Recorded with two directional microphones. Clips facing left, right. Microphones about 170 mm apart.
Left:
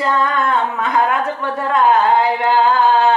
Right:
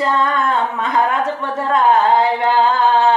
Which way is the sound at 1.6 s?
25° right (ahead or behind).